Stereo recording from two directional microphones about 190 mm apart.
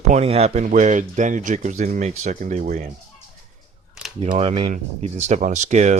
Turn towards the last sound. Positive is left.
turn(degrees=-40)  # may be behind; listen again after turning